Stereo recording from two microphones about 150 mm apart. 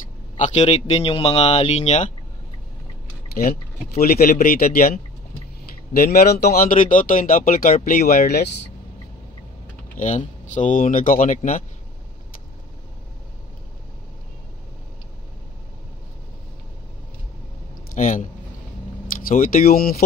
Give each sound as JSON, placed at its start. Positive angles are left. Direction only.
{"t": 0.4, "sound": "a man's voice", "side_deg": 50}
{"t": 3.3, "sound": "speech", "side_deg": 85}
{"t": 5.9, "sound": "speech", "side_deg": 90}
{"t": 7.9, "sound": "speech", "side_deg": 85}
{"t": 9.9, "sound": "speech", "side_deg": 55}
{"t": 17.9, "sound": "speech", "side_deg": 55}
{"t": 19.7, "sound": "speech", "side_deg": 80}